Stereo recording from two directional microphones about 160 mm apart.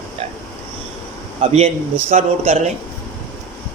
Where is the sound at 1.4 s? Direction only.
45° right (ahead or behind).